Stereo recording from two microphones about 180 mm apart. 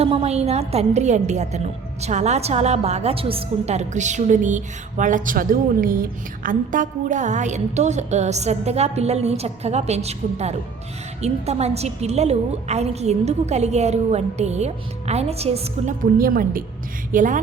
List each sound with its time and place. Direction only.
0.0 s a woman's voice: 35° right (ahead or behind)
16.0 s a woman's voice: 50° right (ahead or behind)